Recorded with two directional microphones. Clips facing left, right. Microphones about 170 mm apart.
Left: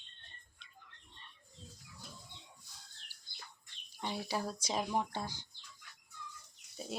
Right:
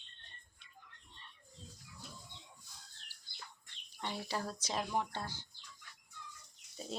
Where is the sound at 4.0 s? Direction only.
10° left (ahead or behind).